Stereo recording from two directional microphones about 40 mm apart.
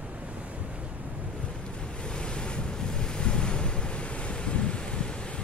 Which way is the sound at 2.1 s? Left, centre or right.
Left.